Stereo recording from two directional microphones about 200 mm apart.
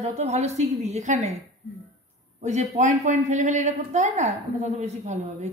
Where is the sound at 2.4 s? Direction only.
35° right (ahead or behind).